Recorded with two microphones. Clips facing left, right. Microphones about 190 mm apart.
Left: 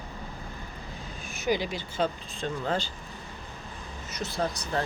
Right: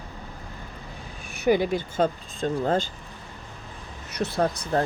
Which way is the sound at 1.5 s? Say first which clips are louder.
Right 7 dB; 55° right (ahead or behind).